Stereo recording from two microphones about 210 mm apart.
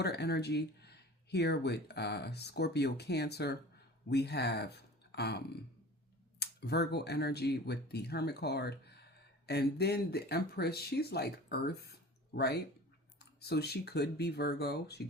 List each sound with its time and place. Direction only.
0.0 s speech: 50° left (ahead or behind)
6.4 s speech: 50° left (ahead or behind)